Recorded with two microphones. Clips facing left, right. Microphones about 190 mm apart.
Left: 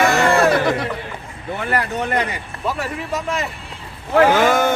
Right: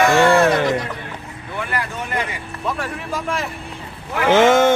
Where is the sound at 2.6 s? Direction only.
5° left (ahead or behind).